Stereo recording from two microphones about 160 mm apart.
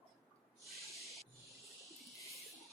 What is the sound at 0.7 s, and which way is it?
Owl, centre (ahead or behind).